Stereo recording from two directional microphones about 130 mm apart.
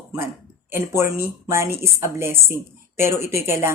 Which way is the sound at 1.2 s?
20° right (ahead or behind).